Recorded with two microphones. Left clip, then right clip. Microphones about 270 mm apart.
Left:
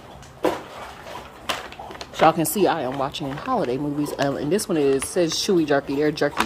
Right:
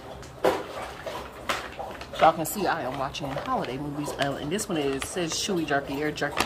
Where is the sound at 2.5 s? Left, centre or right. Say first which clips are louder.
Left 6 dB; left.